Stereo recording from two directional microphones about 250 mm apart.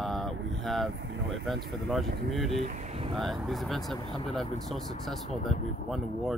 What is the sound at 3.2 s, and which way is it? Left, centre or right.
Speech, centre.